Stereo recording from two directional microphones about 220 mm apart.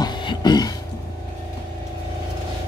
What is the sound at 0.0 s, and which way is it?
Beatboxing, 20° left (ahead or behind).